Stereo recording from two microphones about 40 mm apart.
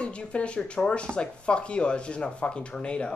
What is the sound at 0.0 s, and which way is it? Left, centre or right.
Speech, left.